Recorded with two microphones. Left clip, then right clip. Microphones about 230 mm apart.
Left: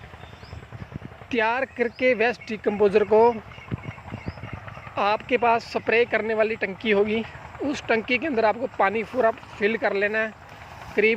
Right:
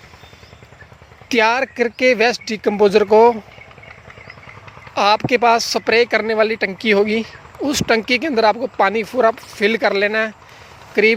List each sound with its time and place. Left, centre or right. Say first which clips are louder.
1.3 s speech: right 8 dB; right
4.9 s speech: right 8 dB; right